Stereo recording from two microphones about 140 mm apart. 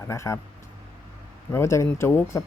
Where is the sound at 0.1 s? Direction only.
20° left (ahead or behind).